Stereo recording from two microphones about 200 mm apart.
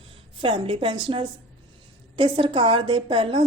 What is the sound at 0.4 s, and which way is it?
A woman's voice, 25° right (ahead or behind).